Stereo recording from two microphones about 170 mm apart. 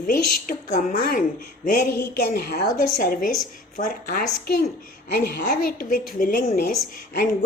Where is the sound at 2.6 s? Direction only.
60° left (ahead or behind).